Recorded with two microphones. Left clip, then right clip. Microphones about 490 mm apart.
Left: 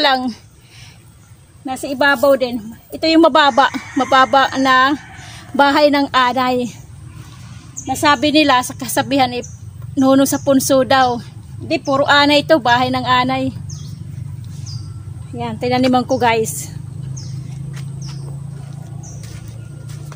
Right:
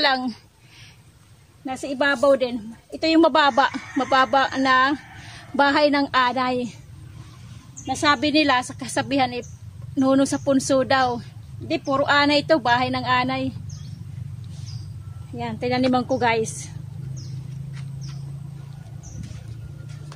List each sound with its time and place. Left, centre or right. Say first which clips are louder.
0.0 s a woman's voice: left 6 dB; right
1.7 s a woman's voice: left 7 dB; right
7.8 s a woman's voice: left 6 dB; right
15.3 s a woman's voice: left 6 dB; right